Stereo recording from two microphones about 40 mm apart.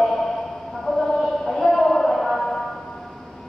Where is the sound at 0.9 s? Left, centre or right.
Centre.